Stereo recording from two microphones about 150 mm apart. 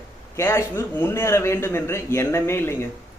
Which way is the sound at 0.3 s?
20° left (ahead or behind).